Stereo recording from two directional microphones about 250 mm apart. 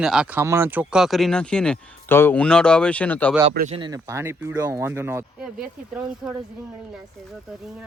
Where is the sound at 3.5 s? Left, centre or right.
Right; by 6.4 s centre.